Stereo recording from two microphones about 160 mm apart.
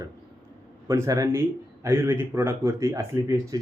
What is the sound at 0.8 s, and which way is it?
Speech, 15° right (ahead or behind).